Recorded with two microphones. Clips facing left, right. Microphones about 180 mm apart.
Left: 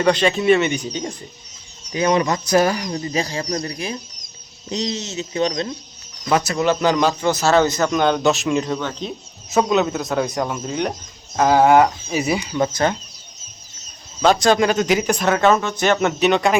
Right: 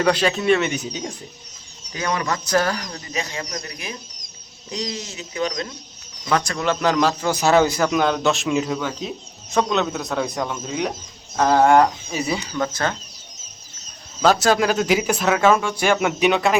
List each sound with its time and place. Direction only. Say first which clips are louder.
0.0 s speech: left 2 dB; 5° right (ahead or behind)
1.9 s speech: left 6 dB; 20° left (ahead or behind)
3.0 s speech: left 6 dB; 35° left (ahead or behind)
6.2 s speech: left 3 dB; 10° left (ahead or behind)
7.3 s speech: right 2 dB; 15° right (ahead or behind); by 12.2 s 5° left (ahead or behind)
12.2 s speech: left 3 dB; 15° left (ahead or behind)
14.2 s speech: left 2 dB; 5° right (ahead or behind)